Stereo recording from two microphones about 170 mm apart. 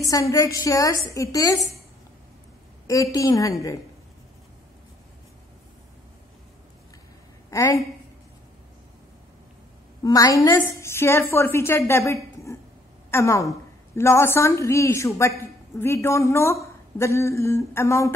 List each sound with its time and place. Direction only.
0.1 s a woman's voice: 20° left (ahead or behind)
2.9 s a woman's voice: 20° left (ahead or behind)
7.5 s a woman's voice: 20° left (ahead or behind)
10.0 s a woman's voice: 20° left (ahead or behind)